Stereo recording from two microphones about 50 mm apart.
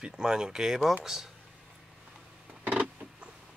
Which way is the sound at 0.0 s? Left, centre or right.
Centre.